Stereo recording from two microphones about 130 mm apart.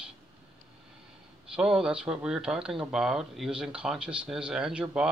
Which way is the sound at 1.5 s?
5° right (ahead or behind).